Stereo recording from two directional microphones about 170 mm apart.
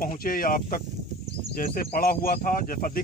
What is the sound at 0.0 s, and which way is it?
Speech, 55° left (ahead or behind).